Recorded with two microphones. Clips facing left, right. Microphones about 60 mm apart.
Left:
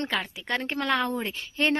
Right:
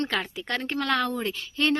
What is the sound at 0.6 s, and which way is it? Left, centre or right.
Speech, left.